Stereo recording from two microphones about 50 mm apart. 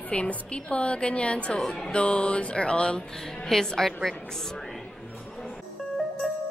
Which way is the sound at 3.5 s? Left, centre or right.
Centre.